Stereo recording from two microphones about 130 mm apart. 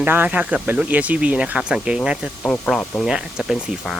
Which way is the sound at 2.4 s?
5° left (ahead or behind).